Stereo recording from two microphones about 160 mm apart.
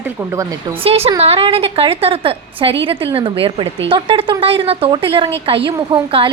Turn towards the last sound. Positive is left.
turn(degrees=-35)  # may be behind; listen again after turning